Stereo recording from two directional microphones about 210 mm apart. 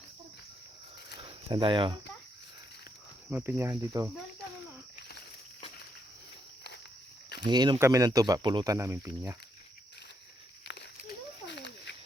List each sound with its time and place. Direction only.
1.2 s cricket: 25° right (ahead or behind)
3.2 s speech: 10° right (ahead or behind)
7.4 s speech: 20° right (ahead or behind)
11.4 s cat: 55° left (ahead or behind)